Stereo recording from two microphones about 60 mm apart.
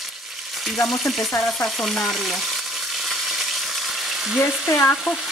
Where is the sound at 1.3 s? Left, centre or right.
Left.